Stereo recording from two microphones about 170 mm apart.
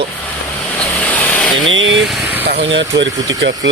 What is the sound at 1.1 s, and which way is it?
Vehicle, 10° left (ahead or behind).